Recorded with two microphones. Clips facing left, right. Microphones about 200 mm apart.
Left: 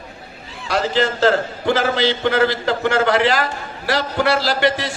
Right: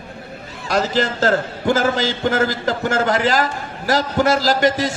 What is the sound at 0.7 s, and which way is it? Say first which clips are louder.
A man's voice: even; 40° right (ahead or behind).